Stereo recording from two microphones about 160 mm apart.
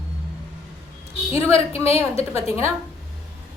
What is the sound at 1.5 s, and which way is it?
Speech, 40° left (ahead or behind).